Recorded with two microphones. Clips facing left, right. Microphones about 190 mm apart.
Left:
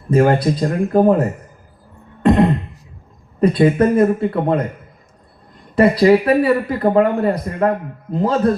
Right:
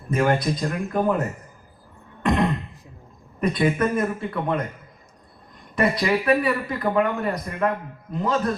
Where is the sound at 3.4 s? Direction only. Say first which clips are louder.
Left 8 dB; 30° left (ahead or behind).